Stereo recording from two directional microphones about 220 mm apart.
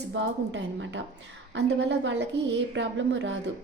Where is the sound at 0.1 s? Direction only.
55° right (ahead or behind).